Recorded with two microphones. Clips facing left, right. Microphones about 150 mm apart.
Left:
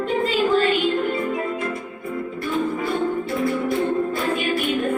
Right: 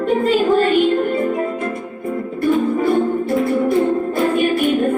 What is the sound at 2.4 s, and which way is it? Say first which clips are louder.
Music: right 9 dB; 45° right (ahead or behind).